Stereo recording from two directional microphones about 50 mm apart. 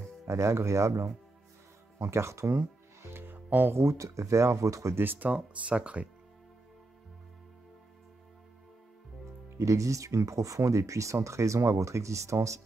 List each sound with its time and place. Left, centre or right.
0.3 s speech: right
3.0 s music: right
3.3 s music: right
3.7 s speech: right
4.9 s speech: right
5.3 s speech: right
9.6 s speech: right